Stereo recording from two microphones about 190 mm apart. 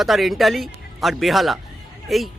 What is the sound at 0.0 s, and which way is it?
Speech, centre (ahead or behind).